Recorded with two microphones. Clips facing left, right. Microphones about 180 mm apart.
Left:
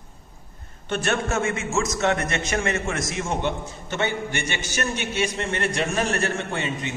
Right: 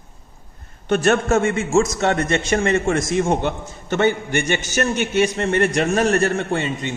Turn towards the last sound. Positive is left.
turn(degrees=-35)  # may be behind; listen again after turning